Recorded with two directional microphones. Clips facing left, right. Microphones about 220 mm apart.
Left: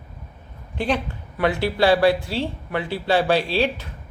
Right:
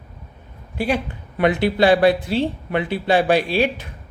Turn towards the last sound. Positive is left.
turn(degrees=-15)  # may be behind; listen again after turning